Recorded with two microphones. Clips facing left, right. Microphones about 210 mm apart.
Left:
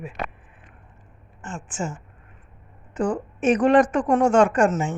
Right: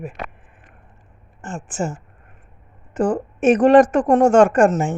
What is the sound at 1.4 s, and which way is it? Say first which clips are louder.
Speech: right 5 dB; 45° right (ahead or behind).